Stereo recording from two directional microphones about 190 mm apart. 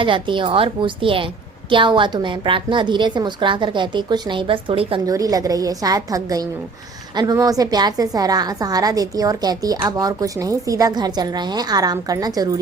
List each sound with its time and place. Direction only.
0.0 s a woman's voice: 25° right (ahead or behind)